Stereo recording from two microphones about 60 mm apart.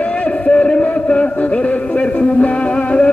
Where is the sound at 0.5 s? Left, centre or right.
Centre.